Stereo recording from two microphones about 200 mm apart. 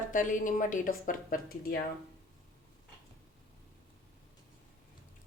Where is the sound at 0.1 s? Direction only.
40° left (ahead or behind).